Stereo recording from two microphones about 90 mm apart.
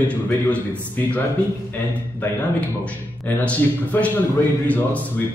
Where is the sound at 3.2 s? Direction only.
15° left (ahead or behind).